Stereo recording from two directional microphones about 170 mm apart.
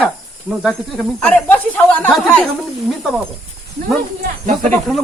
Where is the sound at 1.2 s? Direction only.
5° left (ahead or behind).